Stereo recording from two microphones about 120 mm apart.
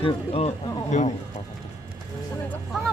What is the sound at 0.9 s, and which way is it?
Speech, 85° left.